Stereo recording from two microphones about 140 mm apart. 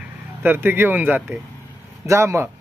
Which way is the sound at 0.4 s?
15° right (ahead or behind).